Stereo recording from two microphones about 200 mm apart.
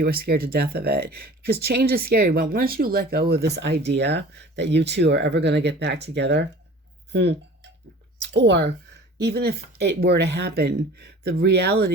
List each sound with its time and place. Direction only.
0.0 s speech: 50° right (ahead or behind)
7.1 s a sound: 60° right (ahead or behind)
8.2 s speech: 60° right (ahead or behind)